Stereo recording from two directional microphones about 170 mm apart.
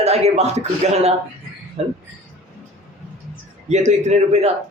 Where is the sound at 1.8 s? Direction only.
40° right (ahead or behind).